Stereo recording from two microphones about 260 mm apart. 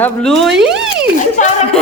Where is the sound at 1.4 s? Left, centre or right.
Left.